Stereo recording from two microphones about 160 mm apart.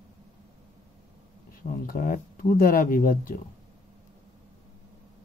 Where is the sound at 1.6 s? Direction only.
60° left (ahead or behind).